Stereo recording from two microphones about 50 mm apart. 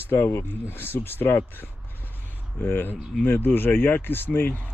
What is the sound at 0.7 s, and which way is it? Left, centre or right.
Speech, left.